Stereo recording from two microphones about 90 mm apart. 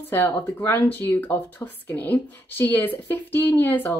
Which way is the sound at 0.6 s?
25° left (ahead or behind).